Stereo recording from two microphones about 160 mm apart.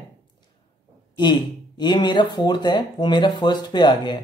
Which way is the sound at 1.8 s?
30° left (ahead or behind).